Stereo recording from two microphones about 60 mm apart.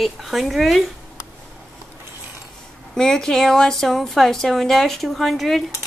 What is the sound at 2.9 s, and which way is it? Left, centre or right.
A woman's voice, centre.